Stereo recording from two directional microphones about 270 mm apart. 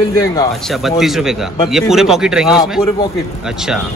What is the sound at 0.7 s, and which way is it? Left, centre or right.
Speech, centre.